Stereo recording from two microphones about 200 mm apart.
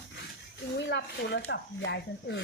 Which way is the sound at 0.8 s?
60° left (ahead or behind).